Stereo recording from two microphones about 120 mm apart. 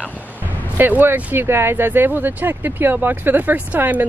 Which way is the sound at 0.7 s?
15° right (ahead or behind).